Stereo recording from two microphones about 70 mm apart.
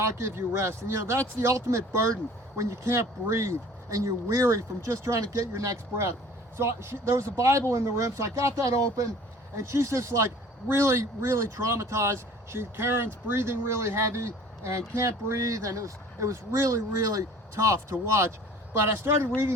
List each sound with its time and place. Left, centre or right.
0.0 s speech: right